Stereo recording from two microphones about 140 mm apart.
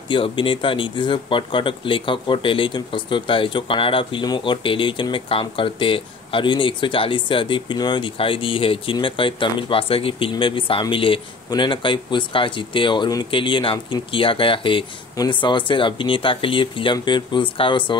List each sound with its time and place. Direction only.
0.1 s speech: 35° left (ahead or behind)